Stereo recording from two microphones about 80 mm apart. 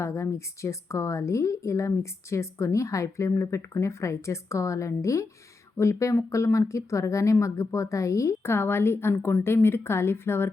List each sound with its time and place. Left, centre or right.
0.0 s a woman's voice: left